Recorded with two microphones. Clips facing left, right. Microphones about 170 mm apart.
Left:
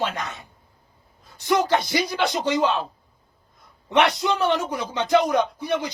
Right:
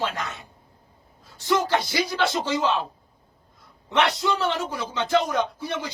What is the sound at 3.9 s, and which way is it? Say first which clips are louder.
A man's voice: left 2 dB; 15° left (ahead or behind).